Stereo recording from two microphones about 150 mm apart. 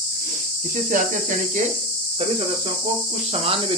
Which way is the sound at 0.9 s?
55° right (ahead or behind).